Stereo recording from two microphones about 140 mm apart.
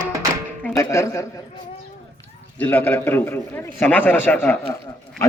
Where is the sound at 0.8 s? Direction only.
20° left (ahead or behind).